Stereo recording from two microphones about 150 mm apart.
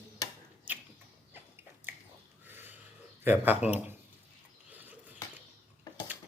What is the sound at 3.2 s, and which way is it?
Speech, 10° right (ahead or behind).